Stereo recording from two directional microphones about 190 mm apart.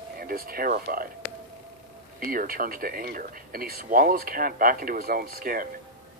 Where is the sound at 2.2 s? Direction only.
50° right (ahead or behind).